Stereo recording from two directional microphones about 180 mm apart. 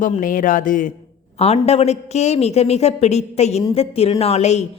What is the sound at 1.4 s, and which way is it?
A woman's voice, 35° left (ahead or behind).